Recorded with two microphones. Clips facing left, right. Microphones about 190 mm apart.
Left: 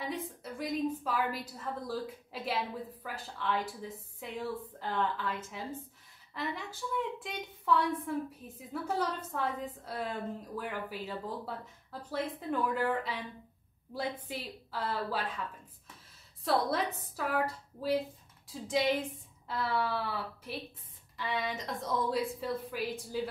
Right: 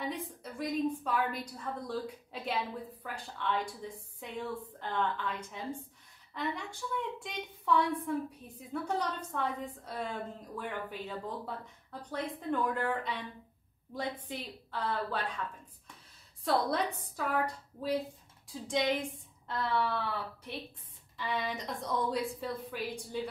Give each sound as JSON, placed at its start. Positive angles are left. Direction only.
{"t": 0.0, "sound": "a woman's voice", "side_deg": 0}
{"t": 16.4, "sound": "a woman's voice", "side_deg": 0}